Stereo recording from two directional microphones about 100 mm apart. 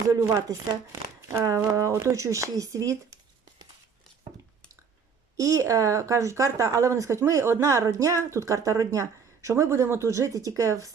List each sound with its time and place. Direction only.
0.1 s a woman's voice: 30° right (ahead or behind)
5.4 s a woman's voice: 30° right (ahead or behind)